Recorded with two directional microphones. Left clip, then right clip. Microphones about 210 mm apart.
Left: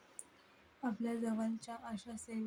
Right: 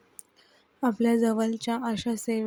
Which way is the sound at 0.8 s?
40° right (ahead or behind).